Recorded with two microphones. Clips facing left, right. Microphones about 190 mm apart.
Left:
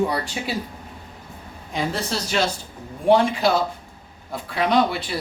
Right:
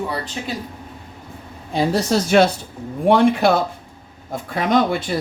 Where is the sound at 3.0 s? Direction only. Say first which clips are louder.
Right 3 dB; 60° right (ahead or behind).